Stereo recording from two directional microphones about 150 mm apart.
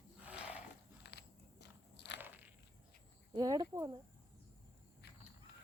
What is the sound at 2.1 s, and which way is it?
Biting, 10° right (ahead or behind).